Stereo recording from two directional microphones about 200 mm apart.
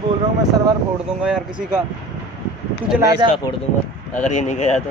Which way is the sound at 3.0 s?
20° right (ahead or behind).